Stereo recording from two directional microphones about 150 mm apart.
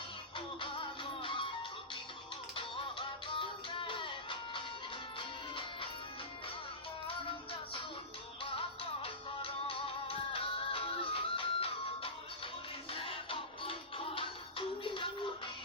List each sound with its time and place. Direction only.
0.3 s music: 35° left (ahead or behind)
2.6 s music: 35° left (ahead or behind)
8.4 s music: 35° left (ahead or behind)